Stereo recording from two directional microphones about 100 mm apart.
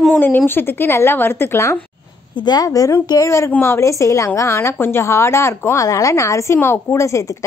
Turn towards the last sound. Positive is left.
turn(degrees=30)  # may be behind; listen again after turning